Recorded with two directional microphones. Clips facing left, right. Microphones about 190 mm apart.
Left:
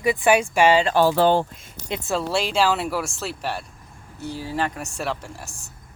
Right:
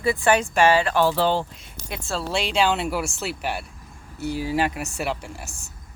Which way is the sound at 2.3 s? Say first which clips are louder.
Even; centre (ahead or behind).